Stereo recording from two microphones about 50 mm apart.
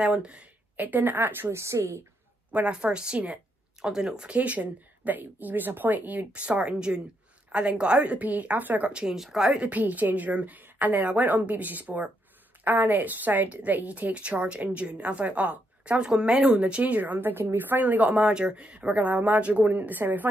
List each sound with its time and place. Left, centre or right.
0.0 s a woman's voice: centre
0.7 s a woman's voice: right
1.5 s a woman's voice: right
2.5 s a woman's voice: right
4.3 s a woman's voice: right
8.0 s a woman's voice: right
8.9 s speech: centre
9.6 s a woman's voice: right
16.8 s a woman's voice: right
18.2 s a woman's voice: centre; by 20.2 s right